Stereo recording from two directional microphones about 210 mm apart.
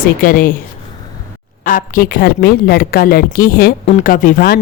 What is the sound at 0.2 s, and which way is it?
Speech, 40° left (ahead or behind).